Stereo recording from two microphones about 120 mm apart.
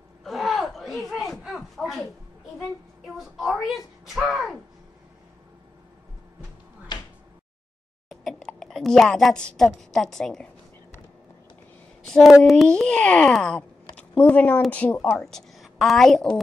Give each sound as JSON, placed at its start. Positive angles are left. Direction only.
{"t": 0.2, "sound": "a sound", "side_deg": 0}
{"t": 3.3, "sound": "a woman's voice", "side_deg": 0}
{"t": 6.9, "sound": "door", "side_deg": 35}
{"t": 8.1, "sound": "a sound", "side_deg": 0}
{"t": 9.6, "sound": "a woman's voice", "side_deg": 0}
{"t": 12.1, "sound": "a woman's voice", "side_deg": 0}